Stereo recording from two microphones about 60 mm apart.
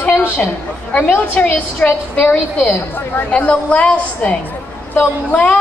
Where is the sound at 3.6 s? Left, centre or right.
Centre.